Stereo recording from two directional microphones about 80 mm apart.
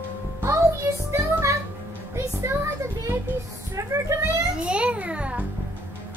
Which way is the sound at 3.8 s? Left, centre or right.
Right.